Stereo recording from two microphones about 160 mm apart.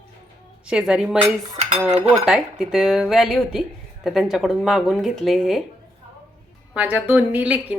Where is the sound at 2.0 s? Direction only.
45° right (ahead or behind).